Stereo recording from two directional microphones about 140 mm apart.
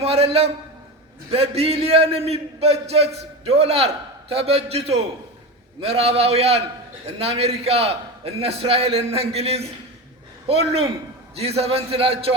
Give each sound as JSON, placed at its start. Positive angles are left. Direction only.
{"t": 0.0, "sound": "a man's voice", "side_deg": -45}